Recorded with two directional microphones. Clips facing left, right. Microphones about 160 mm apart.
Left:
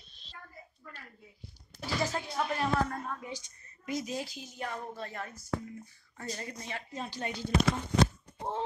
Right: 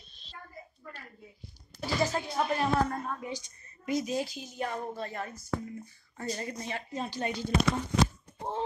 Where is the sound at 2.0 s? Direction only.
20° right (ahead or behind).